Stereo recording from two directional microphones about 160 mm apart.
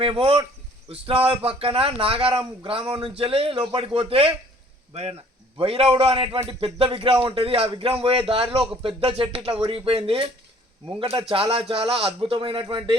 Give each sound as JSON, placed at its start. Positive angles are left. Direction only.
{"t": 0.0, "sound": "a man's voice", "side_deg": -35}
{"t": 5.5, "sound": "a man's voice", "side_deg": -35}
{"t": 10.8, "sound": "a man's voice", "side_deg": -25}